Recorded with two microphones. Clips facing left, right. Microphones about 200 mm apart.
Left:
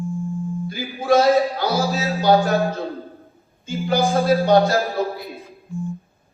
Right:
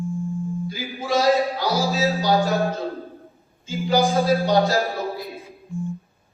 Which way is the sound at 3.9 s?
Centre (ahead or behind).